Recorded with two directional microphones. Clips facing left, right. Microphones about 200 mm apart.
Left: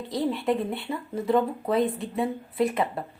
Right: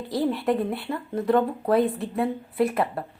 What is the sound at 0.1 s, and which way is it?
Speech, centre (ahead or behind).